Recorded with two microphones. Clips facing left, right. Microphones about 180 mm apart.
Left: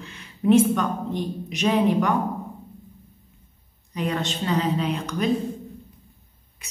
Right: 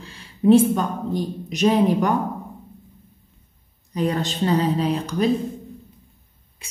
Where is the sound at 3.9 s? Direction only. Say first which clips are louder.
Right 3 dB; 35° right (ahead or behind).